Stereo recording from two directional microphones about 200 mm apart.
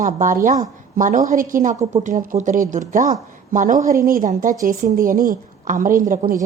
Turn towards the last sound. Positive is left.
turn(degrees=-45)  # may be behind; listen again after turning